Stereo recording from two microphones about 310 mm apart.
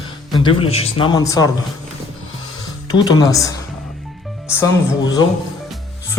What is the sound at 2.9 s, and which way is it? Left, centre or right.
Speech, centre.